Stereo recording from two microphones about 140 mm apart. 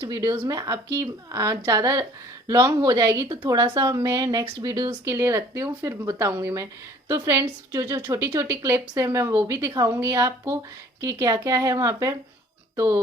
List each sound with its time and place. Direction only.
0.0 s a woman's voice: 25° right (ahead or behind)